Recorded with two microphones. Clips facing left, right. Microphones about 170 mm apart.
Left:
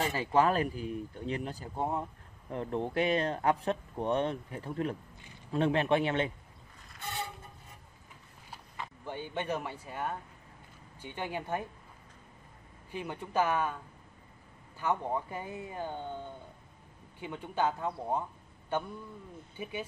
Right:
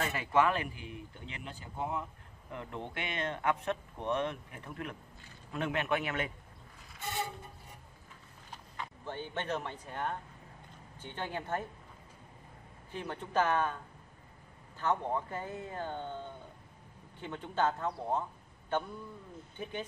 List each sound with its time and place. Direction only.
0.0 s a man's voice: 30° left (ahead or behind)
8.5 s speech: 10° left (ahead or behind)
12.9 s speech: 10° left (ahead or behind)
14.8 s speech: 10° left (ahead or behind)
17.2 s speech: 10° left (ahead or behind)